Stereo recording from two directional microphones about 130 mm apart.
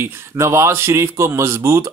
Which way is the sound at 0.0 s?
20° right (ahead or behind).